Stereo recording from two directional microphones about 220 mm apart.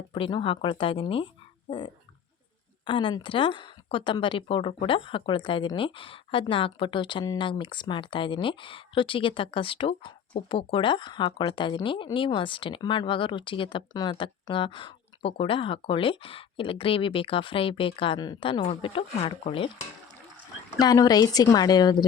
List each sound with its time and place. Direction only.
0.1 s speech: 20° left (ahead or behind)
20.7 s a woman's voice: 15° left (ahead or behind)